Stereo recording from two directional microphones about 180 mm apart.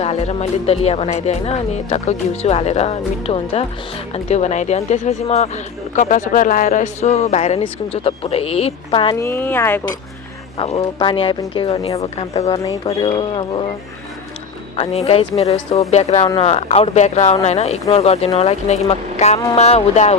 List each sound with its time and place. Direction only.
0.0 s speech: 35° left (ahead or behind)
9.1 s speech: 15° left (ahead or behind)
10.6 s speech: 30° left (ahead or behind)
12.5 s speech: 20° left (ahead or behind)
14.8 s speech: 35° left (ahead or behind)